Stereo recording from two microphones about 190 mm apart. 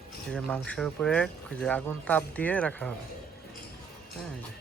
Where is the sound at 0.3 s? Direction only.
5° left (ahead or behind).